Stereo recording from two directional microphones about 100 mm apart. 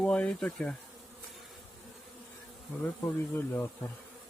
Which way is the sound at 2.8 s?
25° left (ahead or behind).